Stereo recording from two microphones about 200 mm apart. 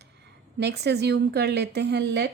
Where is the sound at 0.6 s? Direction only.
55° right (ahead or behind).